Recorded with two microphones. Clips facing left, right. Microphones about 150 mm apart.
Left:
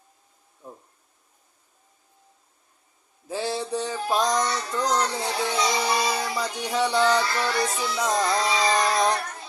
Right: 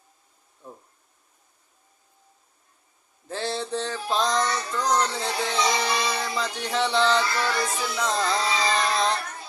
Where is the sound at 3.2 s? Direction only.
10° left (ahead or behind).